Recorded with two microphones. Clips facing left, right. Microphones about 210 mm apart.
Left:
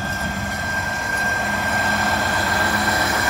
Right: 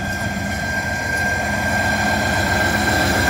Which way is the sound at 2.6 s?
30° right (ahead or behind).